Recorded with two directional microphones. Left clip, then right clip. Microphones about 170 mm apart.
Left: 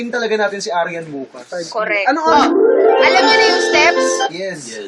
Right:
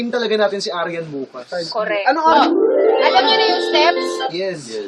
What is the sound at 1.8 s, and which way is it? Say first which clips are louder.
Speech: left 3 dB; 40° left (ahead or behind).